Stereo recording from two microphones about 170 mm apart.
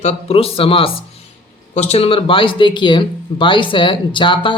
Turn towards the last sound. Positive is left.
turn(degrees=30)  # may be behind; listen again after turning